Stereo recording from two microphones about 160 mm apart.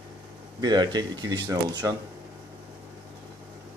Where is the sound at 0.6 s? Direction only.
25° right (ahead or behind).